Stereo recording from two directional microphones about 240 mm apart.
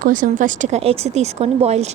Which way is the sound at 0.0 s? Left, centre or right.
Right.